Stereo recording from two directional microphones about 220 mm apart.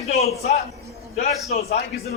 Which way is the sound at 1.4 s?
30° left (ahead or behind).